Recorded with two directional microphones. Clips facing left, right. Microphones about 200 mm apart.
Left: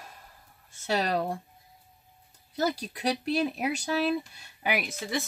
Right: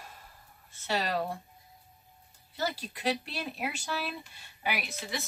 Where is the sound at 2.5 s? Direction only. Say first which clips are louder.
Left 6 dB; 45° left (ahead or behind).